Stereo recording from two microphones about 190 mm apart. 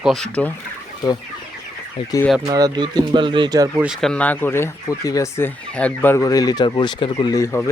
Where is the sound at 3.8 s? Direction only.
Centre (ahead or behind).